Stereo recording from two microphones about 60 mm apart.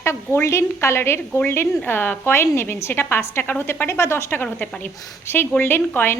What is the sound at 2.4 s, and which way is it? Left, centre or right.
A woman's voice, left.